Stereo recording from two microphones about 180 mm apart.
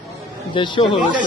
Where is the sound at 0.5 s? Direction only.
25° left (ahead or behind).